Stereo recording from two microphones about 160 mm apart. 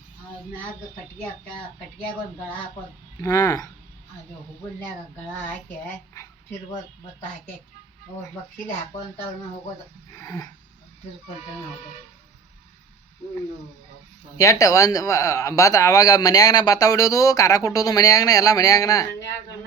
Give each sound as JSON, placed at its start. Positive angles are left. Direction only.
{"t": 3.2, "sound": "a man's voice", "side_deg": 20}
{"t": 5.1, "sound": "speech", "side_deg": 10}
{"t": 10.2, "sound": "a man's voice", "side_deg": 20}
{"t": 14.3, "sound": "a man's voice", "side_deg": 20}